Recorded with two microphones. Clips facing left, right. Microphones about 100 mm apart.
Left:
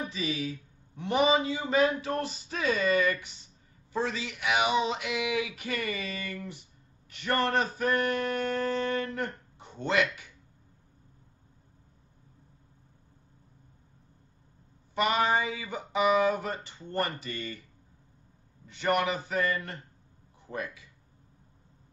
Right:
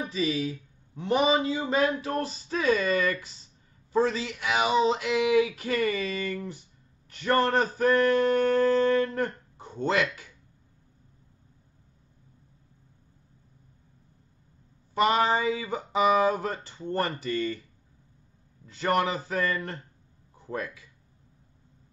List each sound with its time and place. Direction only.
0.1 s a man's voice: 35° right (ahead or behind)
15.0 s speech: 35° right (ahead or behind)
18.7 s speech: 35° right (ahead or behind)